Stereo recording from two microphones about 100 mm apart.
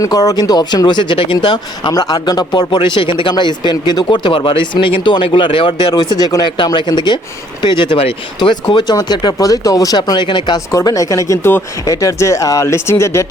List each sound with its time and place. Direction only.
0.0 s speech: 35° left (ahead or behind); by 1.4 s 60° left (ahead or behind)
1.4 s speech: 50° left (ahead or behind)
1.9 s speech: 40° left (ahead or behind); by 5.9 s 60° left (ahead or behind)
6.0 s speech: 45° left (ahead or behind)
8.9 s speech: 45° left (ahead or behind)
10.7 s speech: 35° left (ahead or behind)